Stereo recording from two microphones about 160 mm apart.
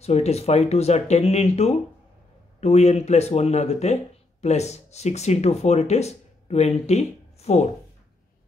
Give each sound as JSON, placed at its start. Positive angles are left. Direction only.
{"t": 0.0, "sound": "speech", "side_deg": 40}